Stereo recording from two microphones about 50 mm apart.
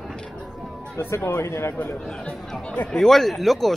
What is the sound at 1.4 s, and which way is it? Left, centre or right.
Speech, left.